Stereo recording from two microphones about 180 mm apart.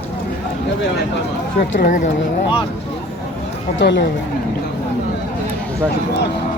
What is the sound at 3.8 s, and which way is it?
Speech, 70° left (ahead or behind).